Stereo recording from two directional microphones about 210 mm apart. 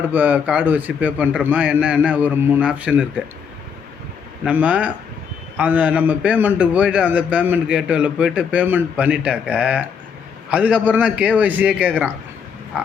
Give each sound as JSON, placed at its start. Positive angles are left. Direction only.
{"t": 0.1, "sound": "a man's voice", "side_deg": -10}
{"t": 4.4, "sound": "a man's voice", "side_deg": -5}
{"t": 12.7, "sound": "a sound", "side_deg": -5}